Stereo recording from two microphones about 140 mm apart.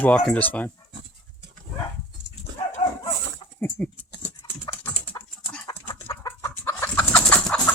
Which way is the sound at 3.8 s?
10° left (ahead or behind).